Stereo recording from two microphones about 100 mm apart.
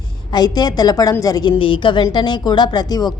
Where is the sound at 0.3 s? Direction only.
45° left (ahead or behind).